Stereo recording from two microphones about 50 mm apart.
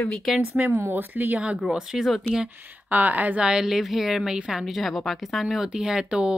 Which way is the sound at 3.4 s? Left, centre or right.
Centre.